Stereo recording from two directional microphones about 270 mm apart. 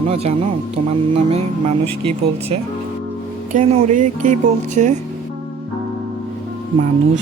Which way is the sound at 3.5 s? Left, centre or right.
Right.